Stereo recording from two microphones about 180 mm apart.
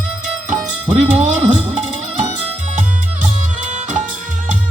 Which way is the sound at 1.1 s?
40° right (ahead or behind).